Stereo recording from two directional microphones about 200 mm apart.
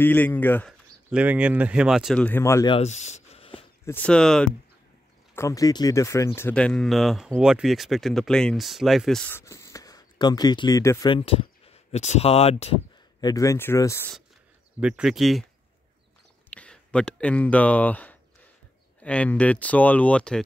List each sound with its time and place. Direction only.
0.0 s speech: 10° left (ahead or behind)
1.1 s speech: 5° right (ahead or behind); by 2.7 s 15° left (ahead or behind)
2.7 s a sound: 35° left (ahead or behind)
3.8 s speech: 10° left (ahead or behind)
5.3 s speech: 15° left (ahead or behind)
9.3 s speech: 15° left (ahead or behind)
11.1 s speech: 30° left (ahead or behind)
13.2 s speech: 15° left (ahead or behind)
14.8 s speech: 5° right (ahead or behind)
16.4 s speech: 5° left (ahead or behind)